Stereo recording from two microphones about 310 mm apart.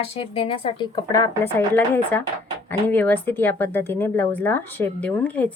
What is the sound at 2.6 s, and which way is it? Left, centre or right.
Speech, centre.